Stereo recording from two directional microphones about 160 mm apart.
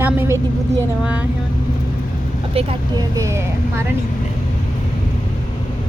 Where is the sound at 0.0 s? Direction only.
15° right (ahead or behind).